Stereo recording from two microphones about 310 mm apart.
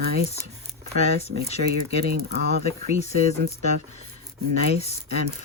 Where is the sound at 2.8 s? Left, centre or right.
Left.